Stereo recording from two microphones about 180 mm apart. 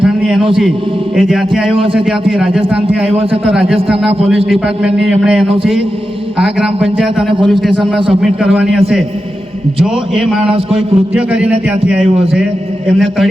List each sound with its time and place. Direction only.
0.0 s a sound: 5° right (ahead or behind)
1.1 s a man's voice: centre (ahead or behind)
3.5 s a man's voice: 5° right (ahead or behind)
9.8 s a man's voice: centre (ahead or behind)
10.5 s a man's voice: 30° right (ahead or behind)
11.1 s a man's voice: 5° right (ahead or behind)